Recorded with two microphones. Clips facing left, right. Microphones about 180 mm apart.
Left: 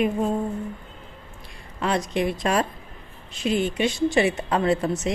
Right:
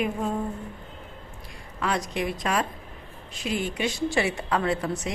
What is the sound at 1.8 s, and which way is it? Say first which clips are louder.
A woman's voice: left 4 dB; 25° left (ahead or behind).